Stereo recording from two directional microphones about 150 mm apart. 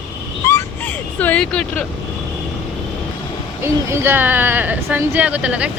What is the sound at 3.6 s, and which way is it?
Speech, 15° right (ahead or behind).